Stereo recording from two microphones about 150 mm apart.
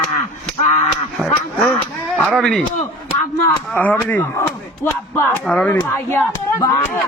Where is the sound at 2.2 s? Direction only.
Centre (ahead or behind).